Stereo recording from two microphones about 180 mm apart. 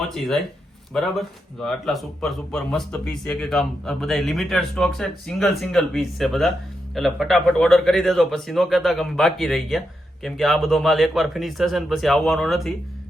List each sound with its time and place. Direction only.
1.6 s speech: centre (ahead or behind)